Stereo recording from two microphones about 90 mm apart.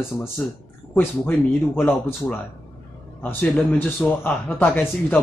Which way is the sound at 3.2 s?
15° left (ahead or behind).